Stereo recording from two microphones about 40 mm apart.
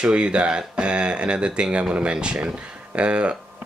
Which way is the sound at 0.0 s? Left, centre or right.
Right.